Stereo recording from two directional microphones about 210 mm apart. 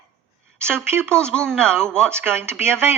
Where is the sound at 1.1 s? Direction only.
5° left (ahead or behind).